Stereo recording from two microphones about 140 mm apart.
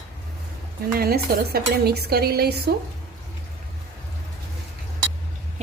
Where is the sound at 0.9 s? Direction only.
90° right.